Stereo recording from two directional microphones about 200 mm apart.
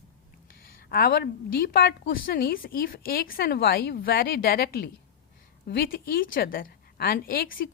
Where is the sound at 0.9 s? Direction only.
50° left (ahead or behind).